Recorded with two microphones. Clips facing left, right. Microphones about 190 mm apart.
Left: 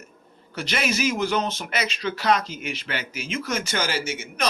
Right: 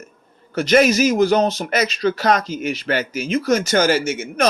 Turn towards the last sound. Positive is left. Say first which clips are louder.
# right 8 dB
turn(degrees=-50)  # may be behind; listen again after turning